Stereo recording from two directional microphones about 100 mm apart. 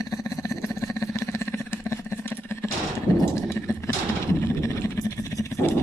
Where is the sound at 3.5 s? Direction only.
25° left (ahead or behind).